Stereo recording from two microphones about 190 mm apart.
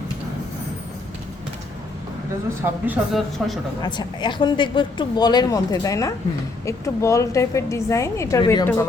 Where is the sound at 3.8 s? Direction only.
25° left (ahead or behind).